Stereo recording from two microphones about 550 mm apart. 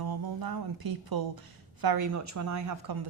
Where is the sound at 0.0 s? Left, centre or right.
Right.